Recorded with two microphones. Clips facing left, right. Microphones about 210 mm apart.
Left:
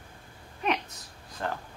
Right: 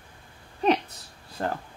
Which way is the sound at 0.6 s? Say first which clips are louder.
Right 7 dB; 35° right (ahead or behind).